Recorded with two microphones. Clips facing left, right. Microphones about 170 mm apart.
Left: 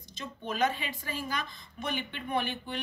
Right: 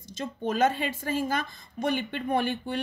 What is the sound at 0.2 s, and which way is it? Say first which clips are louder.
A woman's voice: right 5 dB; 45° right (ahead or behind).